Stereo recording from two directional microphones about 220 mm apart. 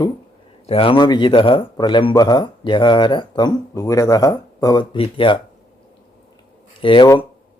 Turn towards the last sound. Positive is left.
turn(degrees=20)  # may be behind; listen again after turning